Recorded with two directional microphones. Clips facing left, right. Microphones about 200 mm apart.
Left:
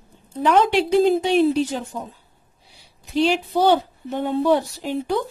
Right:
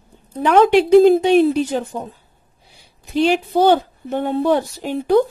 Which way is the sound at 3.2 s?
55° right (ahead or behind).